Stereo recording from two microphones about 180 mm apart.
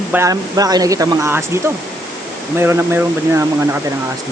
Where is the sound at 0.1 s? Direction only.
15° right (ahead or behind).